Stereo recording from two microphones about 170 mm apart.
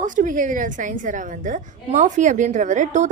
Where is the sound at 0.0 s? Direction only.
50° right (ahead or behind).